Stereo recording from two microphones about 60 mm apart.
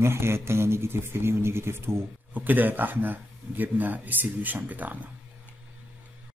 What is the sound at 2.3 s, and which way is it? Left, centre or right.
Speech, right.